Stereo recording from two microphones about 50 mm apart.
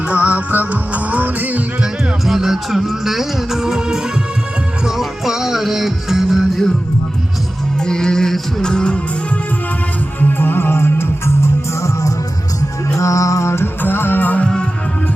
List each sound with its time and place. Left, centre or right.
0.1 s music: right
1.8 s music: centre
7.9 s music: centre
10.2 s music: left
12.9 s mantra: left
13.8 s music: left
14.4 s music: centre